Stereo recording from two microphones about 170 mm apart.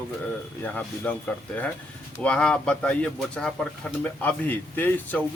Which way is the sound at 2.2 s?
5° left (ahead or behind).